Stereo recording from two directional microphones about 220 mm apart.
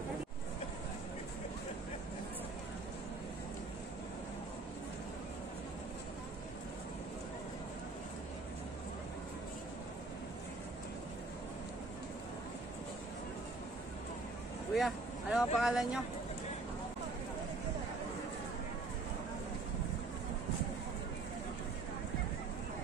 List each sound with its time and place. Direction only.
14.7 s speech: centre (ahead or behind)